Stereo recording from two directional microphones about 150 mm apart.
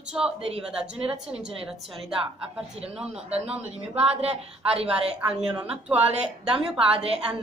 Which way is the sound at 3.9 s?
40° right (ahead or behind).